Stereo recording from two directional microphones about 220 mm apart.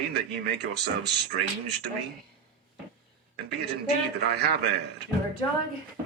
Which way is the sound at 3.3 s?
50° right (ahead or behind).